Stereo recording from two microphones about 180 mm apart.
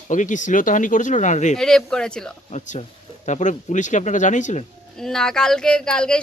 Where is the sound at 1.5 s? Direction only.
5° left (ahead or behind).